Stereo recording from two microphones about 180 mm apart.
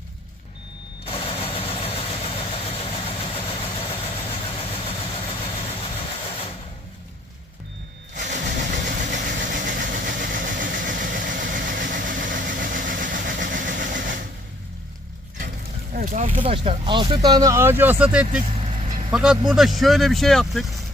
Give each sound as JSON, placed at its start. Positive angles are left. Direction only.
{"t": 1.0, "sound": "vehicle", "side_deg": 30}
{"t": 8.1, "sound": "engine", "side_deg": -45}
{"t": 9.1, "sound": "vehicle", "side_deg": -50}
{"t": 15.9, "sound": "speech", "side_deg": -45}
{"t": 16.4, "sound": "speech", "side_deg": -30}
{"t": 17.2, "sound": "speech", "side_deg": -20}